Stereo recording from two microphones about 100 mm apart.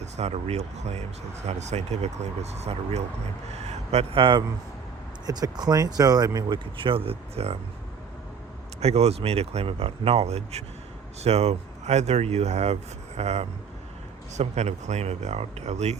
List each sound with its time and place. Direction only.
0.2 s speech: 90° right; by 4.4 s 55° right (ahead or behind)
5.2 s speech: 40° right (ahead or behind)
6.7 s speech: 60° right (ahead or behind); by 7.6 s 90° right
8.8 s speech: 90° right
14.5 s speech: 90° right